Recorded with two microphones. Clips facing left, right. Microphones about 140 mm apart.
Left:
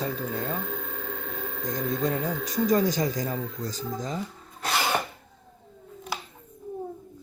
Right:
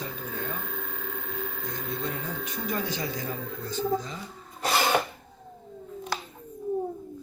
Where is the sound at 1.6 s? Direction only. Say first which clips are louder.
Left 9 dB; 40° left (ahead or behind).